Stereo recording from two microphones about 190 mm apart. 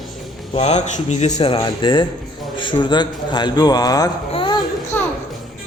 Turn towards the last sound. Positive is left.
turn(degrees=10)  # may be behind; listen again after turning